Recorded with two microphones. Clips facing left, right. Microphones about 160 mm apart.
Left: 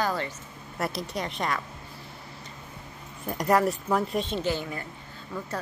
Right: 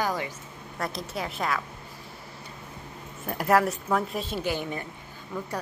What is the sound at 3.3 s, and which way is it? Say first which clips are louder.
A woman's voice: even; centre (ahead or behind).